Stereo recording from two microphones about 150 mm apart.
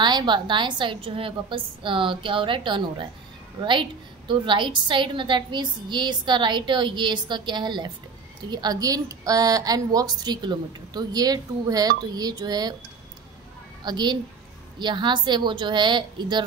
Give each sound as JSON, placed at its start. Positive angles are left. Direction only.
{"t": 0.0, "sound": "a woman's voice", "side_deg": -30}
{"t": 4.3, "sound": "a woman's voice", "side_deg": -35}
{"t": 13.8, "sound": "a woman's voice", "side_deg": -30}